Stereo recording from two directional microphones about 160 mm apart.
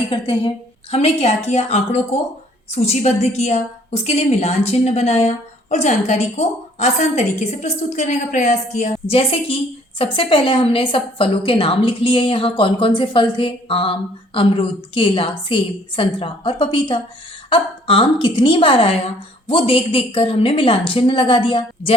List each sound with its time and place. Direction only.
0.1 s a woman's voice: 35° left (ahead or behind)